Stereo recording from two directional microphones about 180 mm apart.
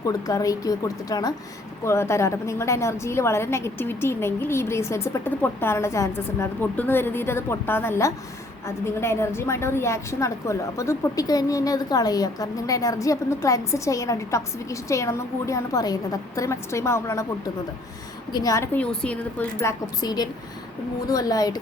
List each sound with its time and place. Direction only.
0.0 s a woman's voice: 20° left (ahead or behind)
18.3 s a woman's voice: 20° left (ahead or behind)